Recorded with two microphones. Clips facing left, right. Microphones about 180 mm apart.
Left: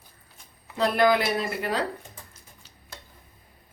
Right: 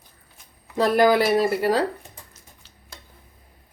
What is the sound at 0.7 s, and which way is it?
Speech, 40° right (ahead or behind).